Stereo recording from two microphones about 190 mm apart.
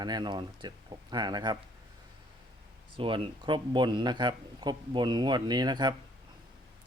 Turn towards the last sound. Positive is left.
turn(degrees=-20)  # may be behind; listen again after turning